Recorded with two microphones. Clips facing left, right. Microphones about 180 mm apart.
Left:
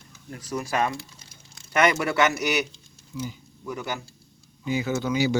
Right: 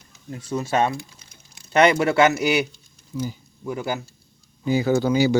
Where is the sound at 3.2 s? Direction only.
30° right (ahead or behind).